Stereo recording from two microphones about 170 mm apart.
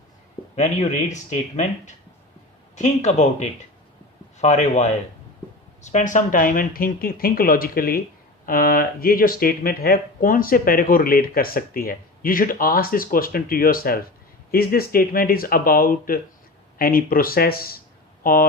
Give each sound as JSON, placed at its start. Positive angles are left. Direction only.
{"t": 0.5, "sound": "speech", "side_deg": 45}